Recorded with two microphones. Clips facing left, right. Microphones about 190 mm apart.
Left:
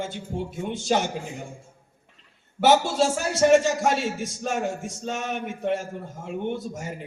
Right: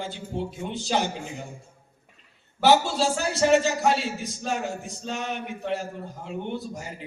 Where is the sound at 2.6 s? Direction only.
50° left (ahead or behind).